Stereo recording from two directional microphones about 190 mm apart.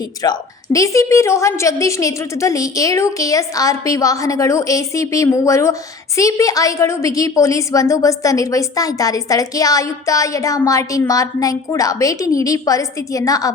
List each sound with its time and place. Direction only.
0.2 s a woman's voice: 20° left (ahead or behind)